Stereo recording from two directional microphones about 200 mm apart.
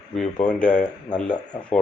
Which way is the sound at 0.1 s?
5° left (ahead or behind).